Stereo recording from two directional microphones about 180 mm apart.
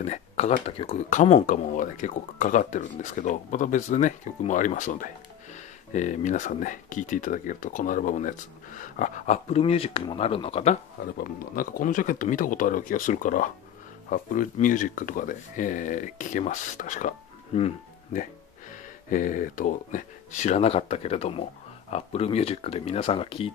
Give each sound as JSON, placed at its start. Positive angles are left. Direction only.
{"t": 0.0, "sound": "speech", "side_deg": 35}
{"t": 11.1, "sound": "speech", "side_deg": 50}
{"t": 17.5, "sound": "speech", "side_deg": 35}
{"t": 18.1, "sound": "speech", "side_deg": 45}